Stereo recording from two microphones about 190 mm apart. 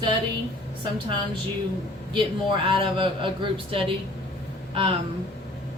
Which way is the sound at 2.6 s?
25° right (ahead or behind).